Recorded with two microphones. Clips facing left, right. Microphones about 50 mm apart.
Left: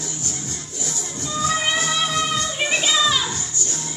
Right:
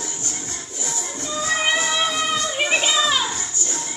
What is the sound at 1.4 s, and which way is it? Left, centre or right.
Music, centre.